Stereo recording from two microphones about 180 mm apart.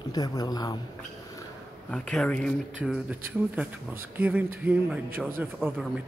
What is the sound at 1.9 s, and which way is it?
A man's voice, 5° left (ahead or behind).